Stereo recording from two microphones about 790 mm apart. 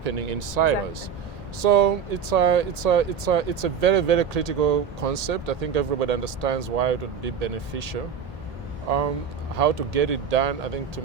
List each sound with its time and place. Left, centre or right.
0.0 s speech: right